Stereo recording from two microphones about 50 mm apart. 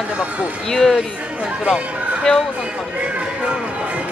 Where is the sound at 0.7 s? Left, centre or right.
Centre.